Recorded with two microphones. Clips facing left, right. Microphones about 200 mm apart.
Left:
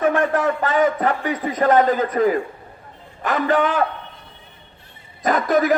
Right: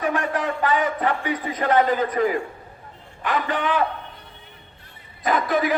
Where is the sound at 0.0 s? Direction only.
50° left (ahead or behind).